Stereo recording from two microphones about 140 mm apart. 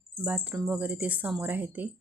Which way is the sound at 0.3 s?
10° right (ahead or behind).